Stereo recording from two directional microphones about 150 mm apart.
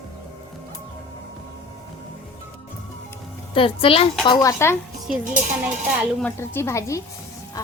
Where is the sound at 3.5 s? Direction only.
35° left (ahead or behind).